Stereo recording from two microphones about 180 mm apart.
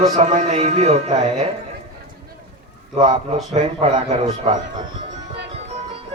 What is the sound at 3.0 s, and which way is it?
Speech, 35° right (ahead or behind).